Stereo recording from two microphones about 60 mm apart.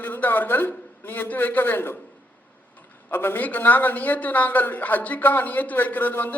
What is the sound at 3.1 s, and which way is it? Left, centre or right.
A man's voice, left.